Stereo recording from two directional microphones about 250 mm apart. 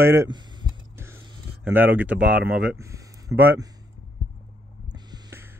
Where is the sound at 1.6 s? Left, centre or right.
Centre.